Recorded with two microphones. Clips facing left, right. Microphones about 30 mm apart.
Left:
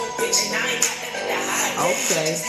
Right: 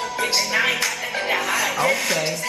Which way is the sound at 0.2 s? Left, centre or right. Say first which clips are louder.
Right 3 dB; right.